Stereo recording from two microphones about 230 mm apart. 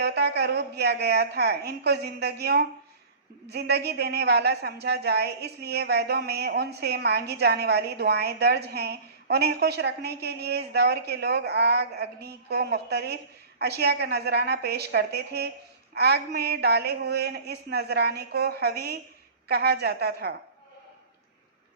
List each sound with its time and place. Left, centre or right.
0.0 s a woman's voice: right